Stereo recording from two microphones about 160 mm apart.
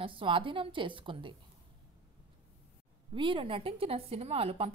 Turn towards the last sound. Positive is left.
turn(degrees=-35)  # may be behind; listen again after turning